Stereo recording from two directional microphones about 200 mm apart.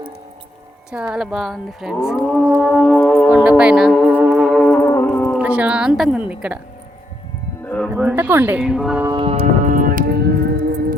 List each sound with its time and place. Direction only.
0.9 s speech: 5° right (ahead or behind)
2.8 s speech: 5° left (ahead or behind)
3.6 s music: 5° right (ahead or behind)
5.4 s a woman's voice: 5° right (ahead or behind)
7.9 s speech: 10° right (ahead or behind)
9.0 s music: 25° right (ahead or behind)
9.7 s music: 45° right (ahead or behind)